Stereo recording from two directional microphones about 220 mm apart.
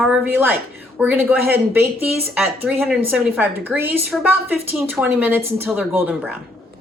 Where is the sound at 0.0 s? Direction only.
5° right (ahead or behind).